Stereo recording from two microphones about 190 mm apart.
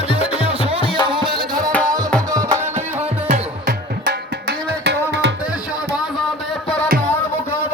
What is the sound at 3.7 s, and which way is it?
Music, 60° right (ahead or behind).